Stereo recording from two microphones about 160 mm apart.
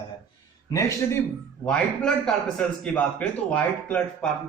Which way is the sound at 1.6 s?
5° left (ahead or behind).